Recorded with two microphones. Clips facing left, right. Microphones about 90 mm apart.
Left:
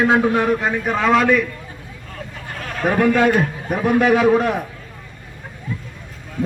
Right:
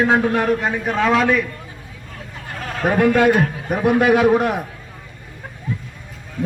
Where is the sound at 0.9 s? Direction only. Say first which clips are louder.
Left 1 dB; centre (ahead or behind).